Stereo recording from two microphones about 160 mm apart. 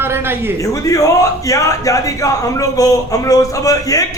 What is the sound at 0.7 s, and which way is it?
Speech, 20° left (ahead or behind).